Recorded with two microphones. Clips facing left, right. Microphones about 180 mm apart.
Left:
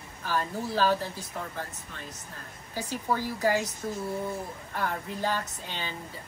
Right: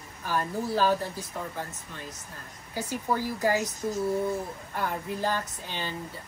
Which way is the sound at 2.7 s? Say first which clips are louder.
Right 1 dB; 10° right (ahead or behind).